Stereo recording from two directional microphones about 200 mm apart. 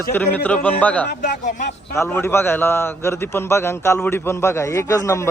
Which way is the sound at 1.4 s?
40° left (ahead or behind).